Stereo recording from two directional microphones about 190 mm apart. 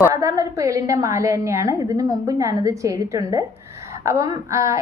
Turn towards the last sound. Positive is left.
turn(degrees=-15)  # may be behind; listen again after turning